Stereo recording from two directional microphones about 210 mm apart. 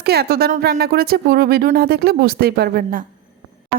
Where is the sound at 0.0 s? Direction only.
50° right (ahead or behind).